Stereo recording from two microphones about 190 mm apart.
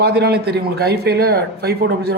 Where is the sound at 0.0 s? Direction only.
60° right (ahead or behind).